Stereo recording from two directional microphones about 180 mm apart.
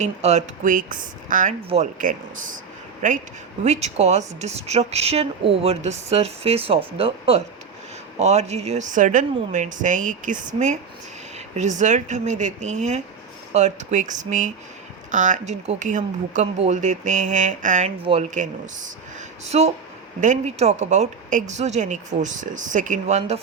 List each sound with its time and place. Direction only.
0.0 s speech: 40° right (ahead or behind)
18.0 s speech: 30° right (ahead or behind)
19.5 s speech: 35° right (ahead or behind)